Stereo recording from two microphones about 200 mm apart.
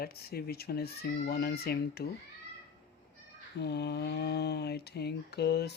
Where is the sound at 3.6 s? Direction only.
55° left (ahead or behind).